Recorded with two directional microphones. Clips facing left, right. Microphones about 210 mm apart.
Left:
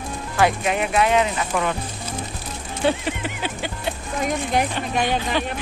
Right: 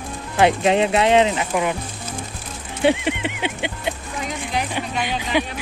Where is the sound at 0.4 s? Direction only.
25° right (ahead or behind).